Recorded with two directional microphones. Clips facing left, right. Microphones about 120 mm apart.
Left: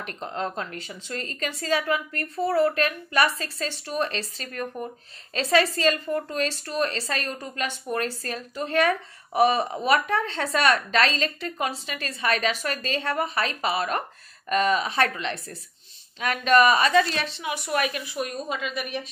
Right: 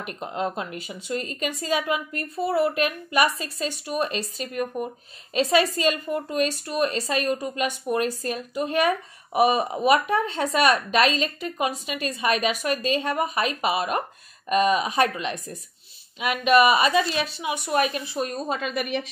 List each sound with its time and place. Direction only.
0.0 s a woman's voice: 10° right (ahead or behind); by 18.6 s 30° right (ahead or behind)
18.6 s a woman's voice: 55° right (ahead or behind)